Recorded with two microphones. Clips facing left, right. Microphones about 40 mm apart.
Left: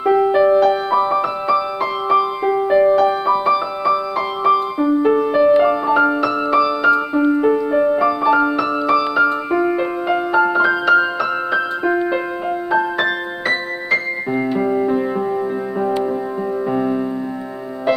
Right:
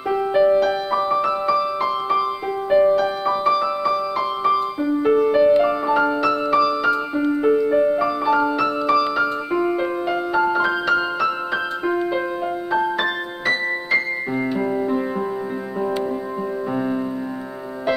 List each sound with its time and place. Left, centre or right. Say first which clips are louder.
0.0 s music: left 4 dB; centre
2.8 s music: left 3 dB; centre
16.7 s music: left 3 dB; centre